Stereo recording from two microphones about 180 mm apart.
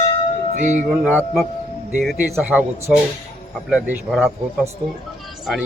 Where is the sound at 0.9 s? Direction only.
10° right (ahead or behind).